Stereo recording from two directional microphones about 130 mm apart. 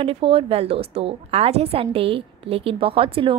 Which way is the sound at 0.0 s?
45° right (ahead or behind).